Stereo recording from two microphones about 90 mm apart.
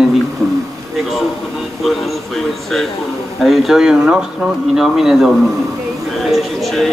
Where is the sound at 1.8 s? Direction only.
Centre (ahead or behind).